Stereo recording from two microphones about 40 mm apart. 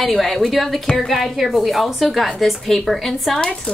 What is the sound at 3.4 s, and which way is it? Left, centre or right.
Speech, left.